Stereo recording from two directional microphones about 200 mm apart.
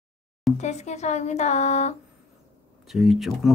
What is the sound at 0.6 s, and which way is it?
Speech, 35° left (ahead or behind).